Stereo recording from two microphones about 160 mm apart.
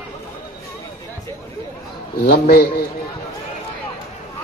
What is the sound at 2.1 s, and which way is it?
Speech, 70° left (ahead or behind).